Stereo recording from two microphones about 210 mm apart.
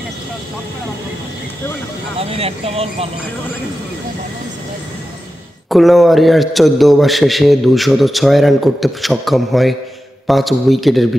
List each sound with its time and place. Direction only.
2.1 s speech: 30° right (ahead or behind)
5.7 s a man's voice: centre (ahead or behind)